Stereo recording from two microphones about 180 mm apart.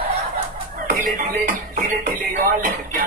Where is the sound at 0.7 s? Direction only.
50° right (ahead or behind).